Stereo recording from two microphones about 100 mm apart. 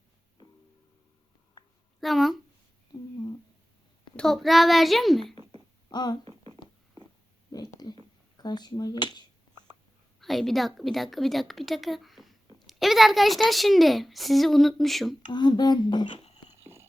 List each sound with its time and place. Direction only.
2.0 s speech: centre (ahead or behind)
4.2 s speech: centre (ahead or behind)
5.2 s a sound: 65° right (ahead or behind)
5.9 s speech: 45° left (ahead or behind)
7.5 s a sound: 40° left (ahead or behind)
10.2 s a woman's voice: centre (ahead or behind)
12.5 s a sound: centre (ahead or behind)
13.5 s speech: centre (ahead or behind)
15.3 s speech: 50° left (ahead or behind)